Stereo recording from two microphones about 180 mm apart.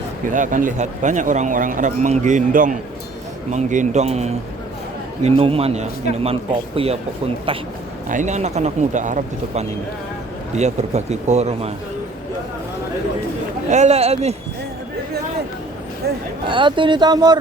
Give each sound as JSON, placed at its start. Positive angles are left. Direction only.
{"t": 0.3, "sound": "speech", "side_deg": -45}
{"t": 8.1, "sound": "speech", "side_deg": -40}
{"t": 13.7, "sound": "speech", "side_deg": -40}
{"t": 16.0, "sound": "speech", "side_deg": -65}
{"t": 16.5, "sound": "speech", "side_deg": -25}